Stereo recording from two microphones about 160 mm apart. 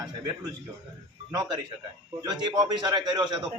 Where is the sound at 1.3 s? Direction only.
25° right (ahead or behind).